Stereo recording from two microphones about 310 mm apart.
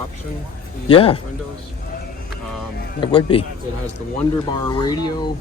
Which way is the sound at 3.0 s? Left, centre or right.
Centre.